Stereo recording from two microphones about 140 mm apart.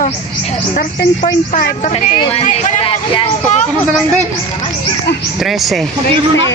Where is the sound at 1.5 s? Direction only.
70° left (ahead or behind).